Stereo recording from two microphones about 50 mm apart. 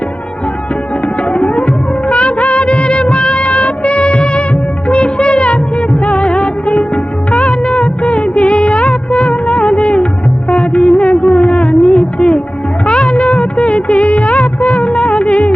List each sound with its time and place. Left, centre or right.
1.0 s music: left
4.9 s music of bollywood: left
10.5 s music: left
12.8 s music of bollywood: left